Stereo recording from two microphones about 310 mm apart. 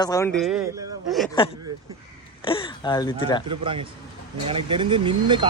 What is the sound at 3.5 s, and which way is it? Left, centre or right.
Speech, centre.